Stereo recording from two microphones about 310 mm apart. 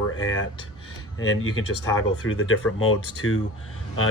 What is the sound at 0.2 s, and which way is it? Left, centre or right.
Speech, left.